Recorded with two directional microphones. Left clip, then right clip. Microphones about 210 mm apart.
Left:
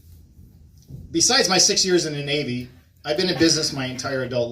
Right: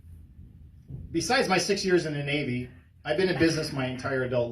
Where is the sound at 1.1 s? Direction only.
35° left (ahead or behind).